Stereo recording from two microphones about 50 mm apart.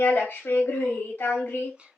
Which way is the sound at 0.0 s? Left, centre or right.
Left.